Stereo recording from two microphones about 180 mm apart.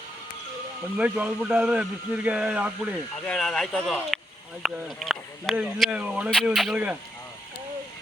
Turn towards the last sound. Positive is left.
turn(degrees=-5)  # may be behind; listen again after turning